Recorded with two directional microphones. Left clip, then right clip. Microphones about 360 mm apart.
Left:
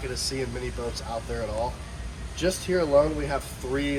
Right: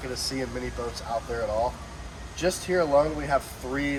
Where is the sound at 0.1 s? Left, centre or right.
Centre.